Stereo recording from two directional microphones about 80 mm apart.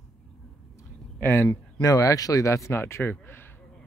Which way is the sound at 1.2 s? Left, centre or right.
Left.